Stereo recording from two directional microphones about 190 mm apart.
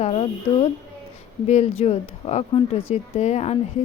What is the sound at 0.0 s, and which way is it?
Speech, 30° left (ahead or behind).